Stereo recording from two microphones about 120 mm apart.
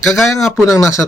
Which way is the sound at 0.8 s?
25° left (ahead or behind).